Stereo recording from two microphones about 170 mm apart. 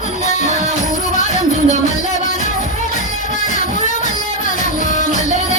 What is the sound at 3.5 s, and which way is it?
Music, 50° left (ahead or behind).